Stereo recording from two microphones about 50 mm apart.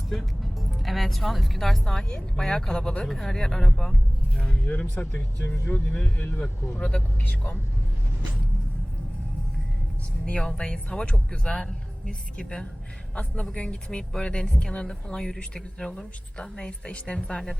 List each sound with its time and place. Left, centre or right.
0.1 s music: centre
1.8 s speech: centre
4.6 s speech: left
5.9 s speech: left
6.7 s speech: left
10.2 s speech: centre
15.9 s speech: left